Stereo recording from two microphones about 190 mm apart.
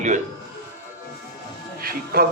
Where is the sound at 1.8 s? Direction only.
50° right (ahead or behind).